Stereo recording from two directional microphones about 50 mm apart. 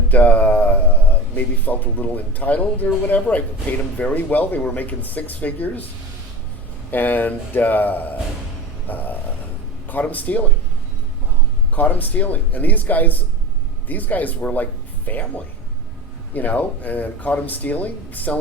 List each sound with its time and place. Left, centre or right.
0.1 s speech: left
6.9 s speech: left
8.9 s a sound: left
9.9 s speech: left
11.7 s speech: left
16.3 s speech: left